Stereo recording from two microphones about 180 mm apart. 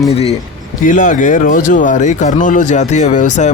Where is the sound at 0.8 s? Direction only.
45° left (ahead or behind).